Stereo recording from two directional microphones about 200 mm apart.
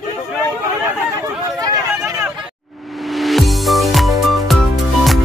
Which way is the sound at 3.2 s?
Centre (ahead or behind).